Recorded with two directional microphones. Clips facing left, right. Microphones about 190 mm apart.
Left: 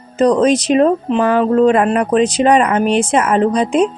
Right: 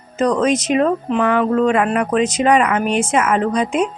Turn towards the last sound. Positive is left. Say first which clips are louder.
# left 4 dB
turn(degrees=30)  # may be behind; listen again after turning